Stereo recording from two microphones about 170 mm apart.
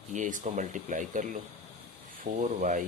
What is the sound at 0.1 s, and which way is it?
Speech, 45° right (ahead or behind).